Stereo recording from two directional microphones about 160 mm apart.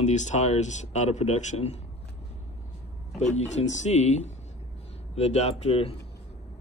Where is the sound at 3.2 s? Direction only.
45° left (ahead or behind).